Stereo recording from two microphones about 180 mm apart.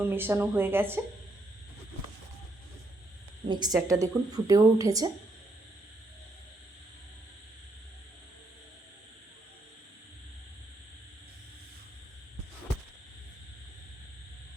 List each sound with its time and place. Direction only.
0.0 s speech: 10° right (ahead or behind)
3.4 s speech: 25° right (ahead or behind)